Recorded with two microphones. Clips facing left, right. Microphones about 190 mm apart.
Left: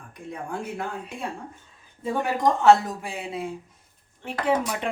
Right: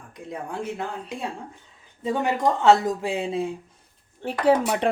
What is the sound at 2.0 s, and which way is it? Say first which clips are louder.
Speech: right 1 dB; 20° right (ahead or behind).